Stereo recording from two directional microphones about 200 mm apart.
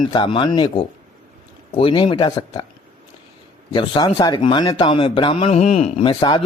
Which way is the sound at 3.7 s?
25° left (ahead or behind).